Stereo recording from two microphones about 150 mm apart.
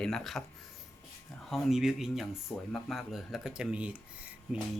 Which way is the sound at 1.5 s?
Centre (ahead or behind).